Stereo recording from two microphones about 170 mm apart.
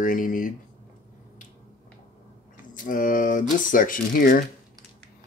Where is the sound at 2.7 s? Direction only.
50° left (ahead or behind).